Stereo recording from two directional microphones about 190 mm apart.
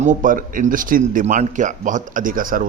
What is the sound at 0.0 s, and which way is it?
Speech, 40° right (ahead or behind).